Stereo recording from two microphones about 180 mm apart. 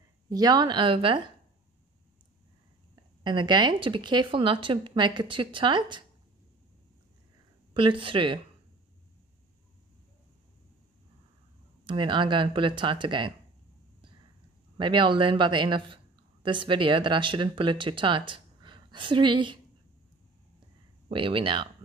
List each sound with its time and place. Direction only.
0.3 s speech: 20° right (ahead or behind)
3.3 s speech: 25° right (ahead or behind)
7.7 s speech: 30° right (ahead or behind)
11.8 s speech: 25° right (ahead or behind)
14.8 s speech: 25° right (ahead or behind)
21.1 s speech: 30° right (ahead or behind)